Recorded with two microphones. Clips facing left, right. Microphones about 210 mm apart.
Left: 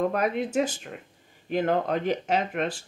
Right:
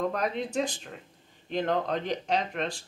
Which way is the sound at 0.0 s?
5° left (ahead or behind).